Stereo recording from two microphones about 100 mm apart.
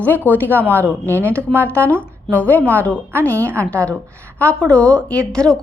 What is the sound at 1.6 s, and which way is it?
Speech, 15° left (ahead or behind).